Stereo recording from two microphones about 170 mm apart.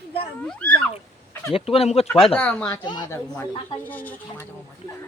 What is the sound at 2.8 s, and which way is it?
Speech, 25° left (ahead or behind).